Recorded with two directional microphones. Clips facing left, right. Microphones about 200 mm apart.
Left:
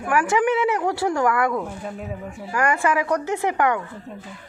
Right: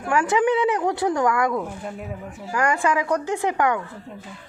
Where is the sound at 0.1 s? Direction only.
20° right (ahead or behind).